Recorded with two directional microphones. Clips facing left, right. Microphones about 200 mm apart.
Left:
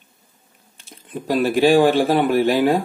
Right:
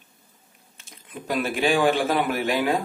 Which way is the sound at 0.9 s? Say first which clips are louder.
Left 6 dB; 30° left (ahead or behind).